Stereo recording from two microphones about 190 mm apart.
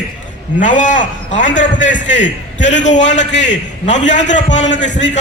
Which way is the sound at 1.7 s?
75° left (ahead or behind).